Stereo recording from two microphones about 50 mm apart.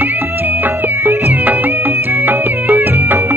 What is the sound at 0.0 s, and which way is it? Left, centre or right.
Music, right.